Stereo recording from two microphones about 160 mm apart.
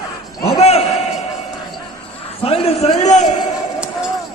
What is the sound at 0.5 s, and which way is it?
Speech, 40° left (ahead or behind).